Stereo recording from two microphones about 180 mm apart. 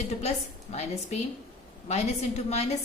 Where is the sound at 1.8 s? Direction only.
35° left (ahead or behind).